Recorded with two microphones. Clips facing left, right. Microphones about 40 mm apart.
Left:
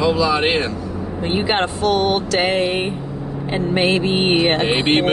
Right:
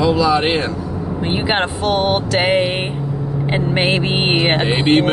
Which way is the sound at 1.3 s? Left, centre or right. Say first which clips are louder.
Even; centre.